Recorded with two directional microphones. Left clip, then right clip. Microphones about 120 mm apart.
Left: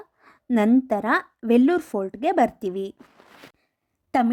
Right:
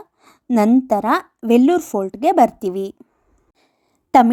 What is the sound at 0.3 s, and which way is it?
A woman's voice, 15° right (ahead or behind).